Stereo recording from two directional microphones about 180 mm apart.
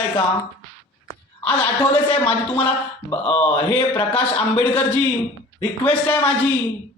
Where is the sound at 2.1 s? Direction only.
30° left (ahead or behind).